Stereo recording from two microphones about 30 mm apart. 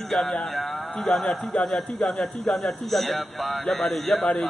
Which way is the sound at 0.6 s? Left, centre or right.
Centre.